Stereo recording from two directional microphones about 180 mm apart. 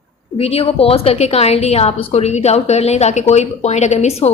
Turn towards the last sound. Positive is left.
turn(degrees=35)  # may be behind; listen again after turning